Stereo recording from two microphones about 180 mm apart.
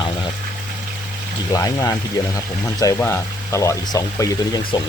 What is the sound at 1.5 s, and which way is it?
Speech, 20° left (ahead or behind).